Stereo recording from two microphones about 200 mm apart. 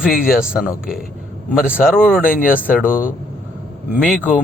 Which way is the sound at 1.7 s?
5° right (ahead or behind).